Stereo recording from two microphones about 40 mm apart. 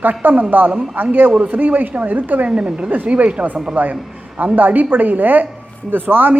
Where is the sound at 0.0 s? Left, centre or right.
Right.